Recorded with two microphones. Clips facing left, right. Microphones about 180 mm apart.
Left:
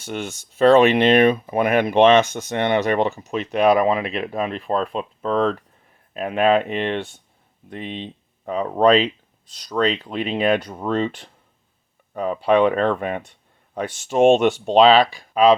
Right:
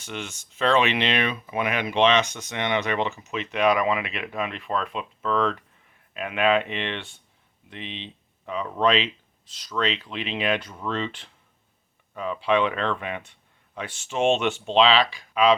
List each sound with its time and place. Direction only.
0.0 s speech: 45° left (ahead or behind)